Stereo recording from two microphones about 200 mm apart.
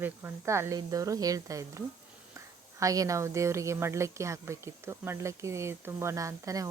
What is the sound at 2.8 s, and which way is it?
Speech, 15° right (ahead or behind).